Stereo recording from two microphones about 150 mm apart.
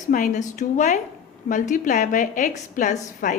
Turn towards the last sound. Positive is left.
turn(degrees=55)  # may be behind; listen again after turning